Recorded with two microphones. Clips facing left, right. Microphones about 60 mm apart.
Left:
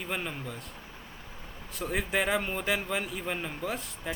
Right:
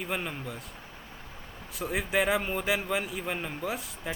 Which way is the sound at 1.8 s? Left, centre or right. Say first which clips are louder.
Right 2 dB; centre.